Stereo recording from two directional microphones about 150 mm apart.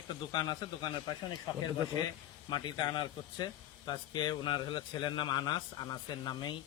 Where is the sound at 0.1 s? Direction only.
30° left (ahead or behind).